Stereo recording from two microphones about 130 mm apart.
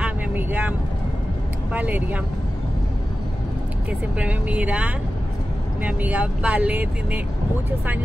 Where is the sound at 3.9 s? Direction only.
10° right (ahead or behind).